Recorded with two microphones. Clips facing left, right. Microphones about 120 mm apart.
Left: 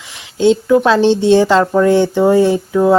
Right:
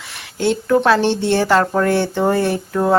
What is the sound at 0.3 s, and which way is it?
Speech, 20° left (ahead or behind).